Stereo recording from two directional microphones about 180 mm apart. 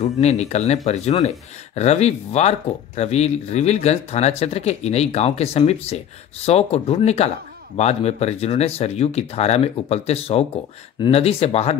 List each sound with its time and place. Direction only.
0.0 s speech: 40° left (ahead or behind)
1.8 s speech: 35° left (ahead or behind)